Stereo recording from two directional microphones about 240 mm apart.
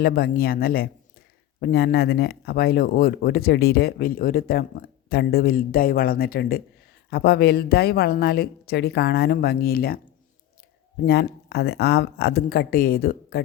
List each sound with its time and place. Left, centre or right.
0.0 s speech: left
11.0 s speech: left